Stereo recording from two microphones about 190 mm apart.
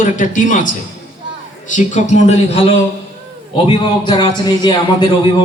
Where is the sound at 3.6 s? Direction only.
25° left (ahead or behind).